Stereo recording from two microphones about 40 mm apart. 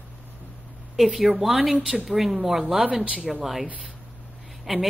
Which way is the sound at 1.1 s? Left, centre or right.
Centre.